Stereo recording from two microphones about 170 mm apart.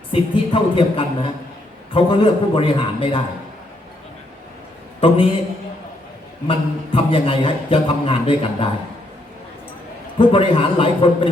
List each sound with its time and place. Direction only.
0.1 s a man's voice: 30° left (ahead or behind)
4.9 s a man's voice: 25° left (ahead or behind)
6.5 s a man's voice: 30° left (ahead or behind)
10.2 s a man's voice: 30° left (ahead or behind)